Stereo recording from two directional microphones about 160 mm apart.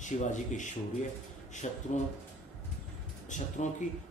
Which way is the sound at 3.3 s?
50° left (ahead or behind).